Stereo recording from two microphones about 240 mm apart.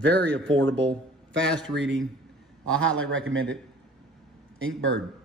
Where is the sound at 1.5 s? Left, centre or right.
Centre.